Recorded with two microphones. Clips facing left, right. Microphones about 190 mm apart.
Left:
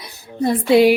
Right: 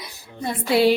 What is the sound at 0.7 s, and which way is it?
Speech, 15° left (ahead or behind).